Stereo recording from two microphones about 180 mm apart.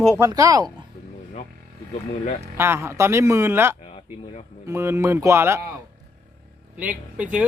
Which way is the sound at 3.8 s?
30° left (ahead or behind).